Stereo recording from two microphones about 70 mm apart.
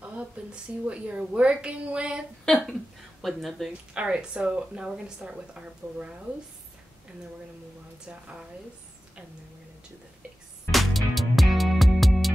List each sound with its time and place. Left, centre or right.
0.0 s speech: centre
2.4 s speech: centre
3.9 s speech: centre
10.7 s music: centre